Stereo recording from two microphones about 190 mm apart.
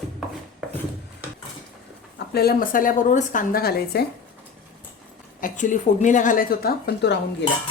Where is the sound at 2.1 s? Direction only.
55° left (ahead or behind).